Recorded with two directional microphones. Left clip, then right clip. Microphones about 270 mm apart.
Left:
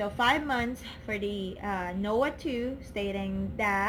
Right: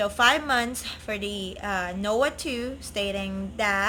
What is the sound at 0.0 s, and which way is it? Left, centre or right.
A woman's voice, centre.